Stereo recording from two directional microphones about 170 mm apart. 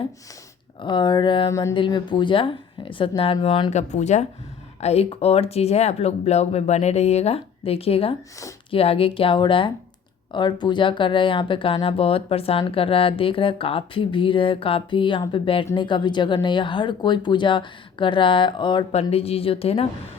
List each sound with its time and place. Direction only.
0.8 s speech: 25° left (ahead or behind)